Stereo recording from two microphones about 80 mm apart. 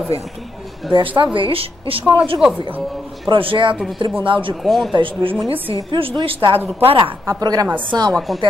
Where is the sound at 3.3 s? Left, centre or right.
Right.